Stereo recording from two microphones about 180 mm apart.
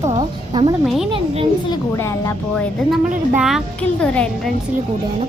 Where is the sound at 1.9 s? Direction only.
15° left (ahead or behind).